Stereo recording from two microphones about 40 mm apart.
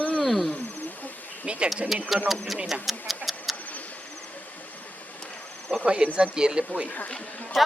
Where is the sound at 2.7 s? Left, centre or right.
Centre.